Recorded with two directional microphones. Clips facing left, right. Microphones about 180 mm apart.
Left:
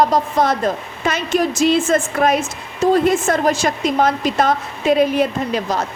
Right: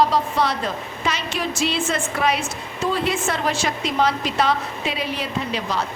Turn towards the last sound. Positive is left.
turn(degrees=45)  # may be behind; listen again after turning